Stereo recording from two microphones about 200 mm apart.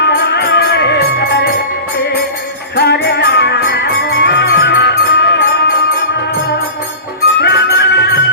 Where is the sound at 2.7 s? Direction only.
55° left (ahead or behind).